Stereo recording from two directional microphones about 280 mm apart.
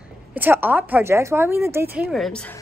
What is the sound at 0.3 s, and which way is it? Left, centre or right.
A woman's voice, centre.